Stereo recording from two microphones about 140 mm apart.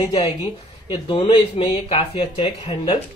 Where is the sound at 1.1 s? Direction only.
40° left (ahead or behind).